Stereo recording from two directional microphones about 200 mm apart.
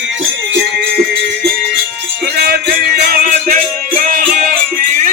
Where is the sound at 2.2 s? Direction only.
50° right (ahead or behind).